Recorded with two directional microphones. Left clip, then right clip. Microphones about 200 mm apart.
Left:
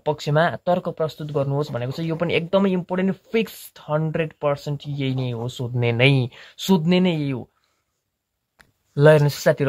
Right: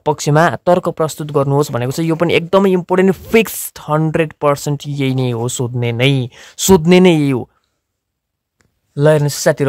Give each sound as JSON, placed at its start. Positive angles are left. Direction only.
{"t": 0.0, "sound": "speech", "side_deg": -35}
{"t": 5.8, "sound": "speech", "side_deg": -20}
{"t": 6.5, "sound": "speech", "side_deg": -35}
{"t": 8.9, "sound": "speech", "side_deg": -15}